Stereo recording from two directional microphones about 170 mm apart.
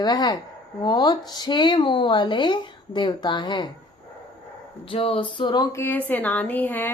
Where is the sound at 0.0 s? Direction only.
25° left (ahead or behind).